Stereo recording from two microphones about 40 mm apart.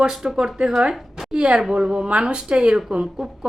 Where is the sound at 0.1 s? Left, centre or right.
Centre.